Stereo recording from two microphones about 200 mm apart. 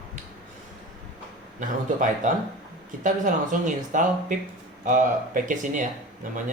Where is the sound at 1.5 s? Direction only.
40° right (ahead or behind).